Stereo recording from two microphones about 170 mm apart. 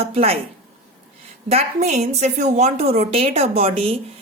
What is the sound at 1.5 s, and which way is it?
Speech, 40° right (ahead or behind).